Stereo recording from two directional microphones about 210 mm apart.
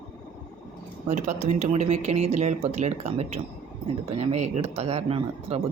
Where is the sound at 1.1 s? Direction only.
35° right (ahead or behind).